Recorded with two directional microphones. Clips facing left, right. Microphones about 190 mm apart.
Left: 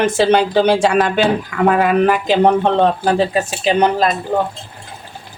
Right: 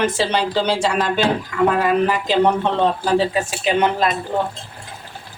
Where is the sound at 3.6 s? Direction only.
40° left (ahead or behind).